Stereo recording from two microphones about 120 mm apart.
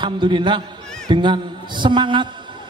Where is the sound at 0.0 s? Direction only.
40° right (ahead or behind).